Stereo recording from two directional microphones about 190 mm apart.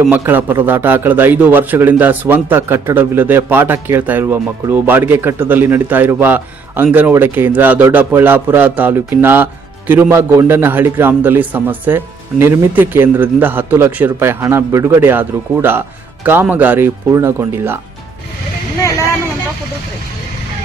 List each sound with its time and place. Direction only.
0.0 s a man's voice: 10° right (ahead or behind)